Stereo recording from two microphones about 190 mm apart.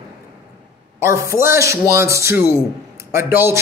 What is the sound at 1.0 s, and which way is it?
A man's voice, 15° right (ahead or behind).